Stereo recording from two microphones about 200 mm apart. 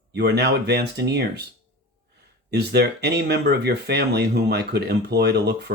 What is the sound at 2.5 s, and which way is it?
Speech, 55° right (ahead or behind).